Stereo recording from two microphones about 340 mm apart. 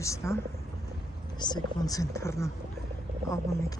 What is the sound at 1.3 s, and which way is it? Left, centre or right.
Speech, centre.